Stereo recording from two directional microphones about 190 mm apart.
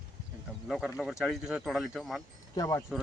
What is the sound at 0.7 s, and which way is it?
Speech, centre (ahead or behind).